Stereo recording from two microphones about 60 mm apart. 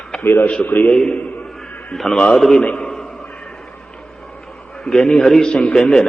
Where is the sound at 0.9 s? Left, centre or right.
Centre.